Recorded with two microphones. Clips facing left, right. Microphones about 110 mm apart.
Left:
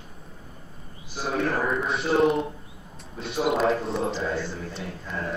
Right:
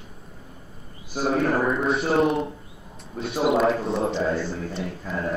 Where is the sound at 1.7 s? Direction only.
Centre (ahead or behind).